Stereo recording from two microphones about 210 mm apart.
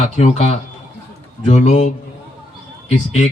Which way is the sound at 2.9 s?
35° left (ahead or behind).